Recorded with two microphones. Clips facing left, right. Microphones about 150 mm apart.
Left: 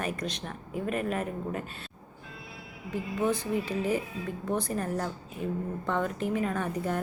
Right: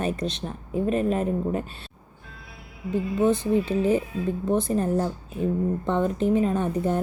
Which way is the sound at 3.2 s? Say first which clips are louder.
Right 7 dB; 25° right (ahead or behind).